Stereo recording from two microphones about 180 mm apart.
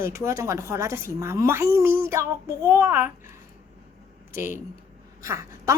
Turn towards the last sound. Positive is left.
turn(degrees=-15)  # may be behind; listen again after turning